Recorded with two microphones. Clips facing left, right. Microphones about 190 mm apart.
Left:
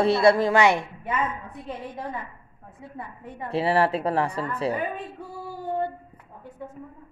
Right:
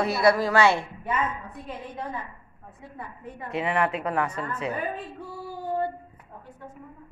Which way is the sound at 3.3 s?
30° left (ahead or behind).